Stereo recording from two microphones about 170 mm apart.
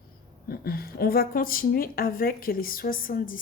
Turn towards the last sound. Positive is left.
turn(degrees=55)  # may be behind; listen again after turning